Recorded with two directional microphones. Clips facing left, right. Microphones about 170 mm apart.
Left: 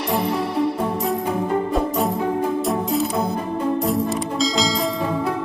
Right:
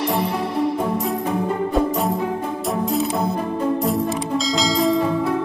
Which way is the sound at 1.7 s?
Centre (ahead or behind).